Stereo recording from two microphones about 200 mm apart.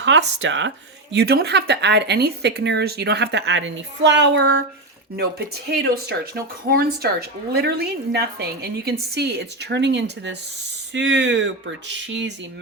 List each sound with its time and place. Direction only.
0.0 s speech: 65° right (ahead or behind)
1.1 s speech: 55° right (ahead or behind)